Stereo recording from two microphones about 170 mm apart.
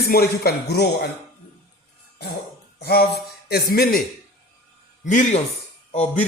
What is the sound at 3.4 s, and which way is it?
Speech, 65° left (ahead or behind).